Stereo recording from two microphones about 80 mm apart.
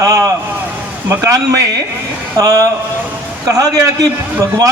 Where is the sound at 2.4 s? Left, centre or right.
Right.